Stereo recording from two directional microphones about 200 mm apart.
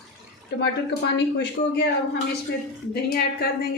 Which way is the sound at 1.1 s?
60° left (ahead or behind).